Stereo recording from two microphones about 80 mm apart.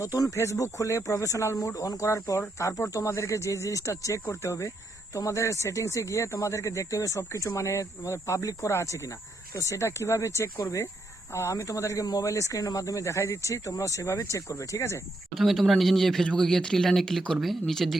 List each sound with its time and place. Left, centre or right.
0.0 s speech: left
15.4 s speech: centre